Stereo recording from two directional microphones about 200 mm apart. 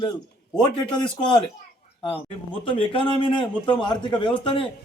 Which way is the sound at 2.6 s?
25° left (ahead or behind).